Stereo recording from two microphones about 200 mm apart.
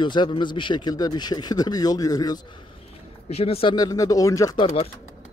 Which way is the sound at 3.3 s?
30° left (ahead or behind).